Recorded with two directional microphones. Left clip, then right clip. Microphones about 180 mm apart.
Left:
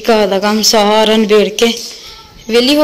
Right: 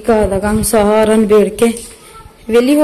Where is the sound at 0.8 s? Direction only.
10° right (ahead or behind).